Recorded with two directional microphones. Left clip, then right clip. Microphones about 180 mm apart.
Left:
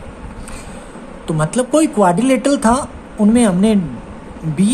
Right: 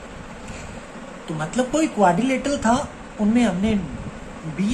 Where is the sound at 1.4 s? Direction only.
70° left (ahead or behind).